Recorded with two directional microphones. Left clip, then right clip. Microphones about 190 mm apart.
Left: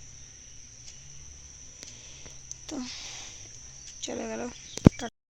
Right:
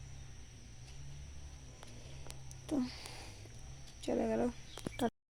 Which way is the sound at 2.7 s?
15° right (ahead or behind).